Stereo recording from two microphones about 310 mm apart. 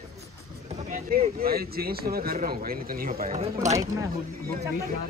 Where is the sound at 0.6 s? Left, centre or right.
Right.